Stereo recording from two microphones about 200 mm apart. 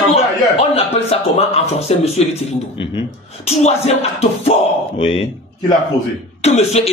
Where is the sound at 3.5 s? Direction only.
30° left (ahead or behind).